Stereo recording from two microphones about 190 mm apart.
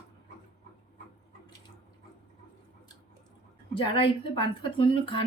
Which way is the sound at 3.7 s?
25° left (ahead or behind).